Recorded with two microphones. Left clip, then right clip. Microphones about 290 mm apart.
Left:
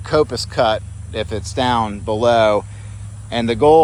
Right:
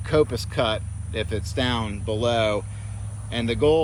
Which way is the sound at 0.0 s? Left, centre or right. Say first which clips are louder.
Left 5 dB; centre.